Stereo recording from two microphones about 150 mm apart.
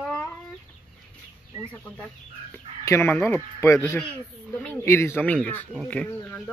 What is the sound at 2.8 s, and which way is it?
Speech, 15° left (ahead or behind).